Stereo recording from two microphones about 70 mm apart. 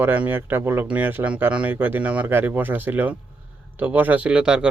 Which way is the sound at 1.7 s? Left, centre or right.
Right.